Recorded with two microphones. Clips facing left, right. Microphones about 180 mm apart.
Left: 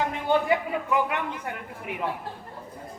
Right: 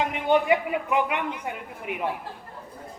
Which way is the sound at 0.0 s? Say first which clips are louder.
Right 2 dB; 20° right (ahead or behind).